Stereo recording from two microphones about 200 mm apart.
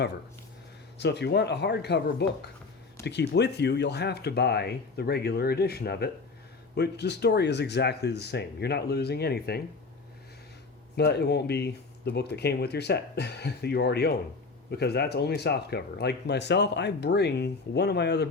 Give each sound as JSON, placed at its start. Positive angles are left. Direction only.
{"t": 0.9, "sound": "speech", "side_deg": 55}
{"t": 10.9, "sound": "speech", "side_deg": 55}